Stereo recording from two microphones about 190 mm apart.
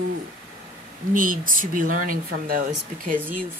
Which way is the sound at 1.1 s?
45° right (ahead or behind).